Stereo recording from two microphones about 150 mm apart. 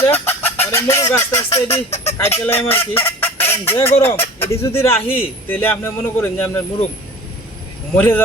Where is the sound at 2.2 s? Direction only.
15° left (ahead or behind).